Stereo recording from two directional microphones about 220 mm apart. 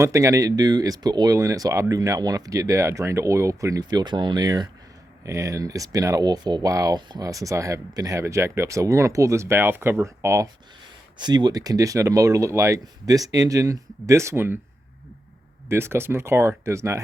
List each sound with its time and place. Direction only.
0.0 s speech: 15° right (ahead or behind)
15.7 s speech: 10° right (ahead or behind)